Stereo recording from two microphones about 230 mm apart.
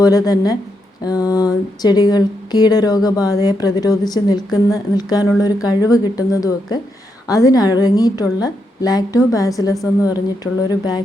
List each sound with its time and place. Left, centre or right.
0.0 s speech: centre